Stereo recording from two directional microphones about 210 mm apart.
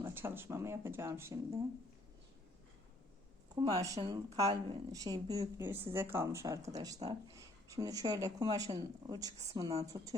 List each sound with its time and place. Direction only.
0.0 s a woman's voice: 10° right (ahead or behind)
3.5 s a woman's voice: 20° right (ahead or behind)